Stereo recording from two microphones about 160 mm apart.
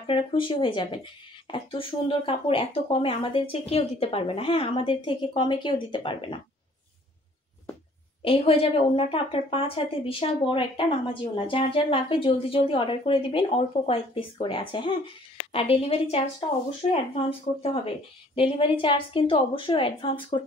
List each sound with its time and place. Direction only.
0.0 s a woman's voice: 30° left (ahead or behind)
8.2 s a woman's voice: 35° left (ahead or behind)